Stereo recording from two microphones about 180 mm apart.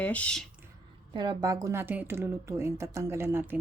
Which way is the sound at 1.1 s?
25° right (ahead or behind).